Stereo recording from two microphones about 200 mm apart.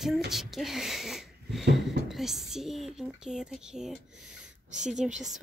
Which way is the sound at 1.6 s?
55° right (ahead or behind).